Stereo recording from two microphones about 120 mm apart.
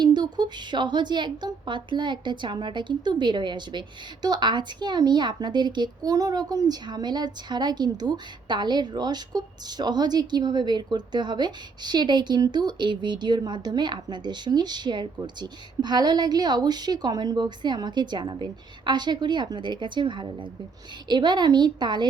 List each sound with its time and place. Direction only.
0.0 s a woman's voice: 40° right (ahead or behind)